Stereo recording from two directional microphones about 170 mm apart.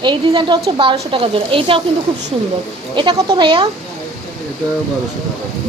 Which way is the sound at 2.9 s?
25° right (ahead or behind).